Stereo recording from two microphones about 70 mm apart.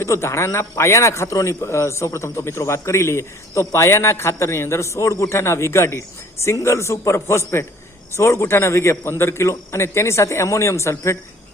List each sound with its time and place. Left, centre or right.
0.0 s a man's voice: left